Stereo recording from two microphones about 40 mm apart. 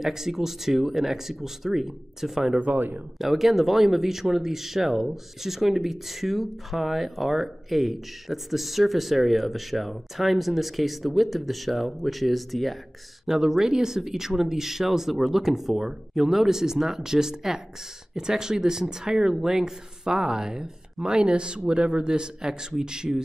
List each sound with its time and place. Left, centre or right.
0.0 s speech: centre
2.6 s speech: right
3.2 s speech: centre
13.3 s speech: centre